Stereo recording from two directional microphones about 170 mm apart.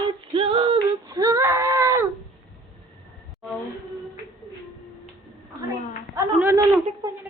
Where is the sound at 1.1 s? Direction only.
20° right (ahead or behind).